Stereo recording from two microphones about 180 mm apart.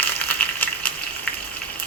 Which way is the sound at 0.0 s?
10° left (ahead or behind).